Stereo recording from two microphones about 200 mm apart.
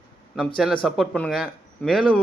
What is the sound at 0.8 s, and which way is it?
A man's voice, centre (ahead or behind).